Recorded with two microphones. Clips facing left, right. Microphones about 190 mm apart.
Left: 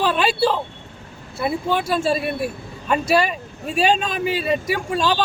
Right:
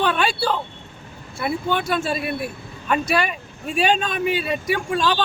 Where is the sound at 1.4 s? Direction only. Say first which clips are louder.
Left 1 dB; 5° left (ahead or behind).